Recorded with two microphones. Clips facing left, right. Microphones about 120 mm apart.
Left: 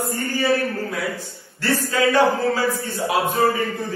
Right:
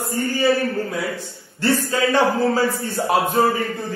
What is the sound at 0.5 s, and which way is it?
A man's voice, 25° right (ahead or behind).